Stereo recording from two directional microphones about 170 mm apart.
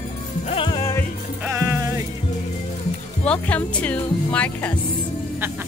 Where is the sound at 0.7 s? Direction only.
15° left (ahead or behind).